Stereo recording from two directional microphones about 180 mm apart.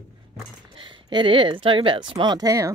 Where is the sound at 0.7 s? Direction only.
25° right (ahead or behind).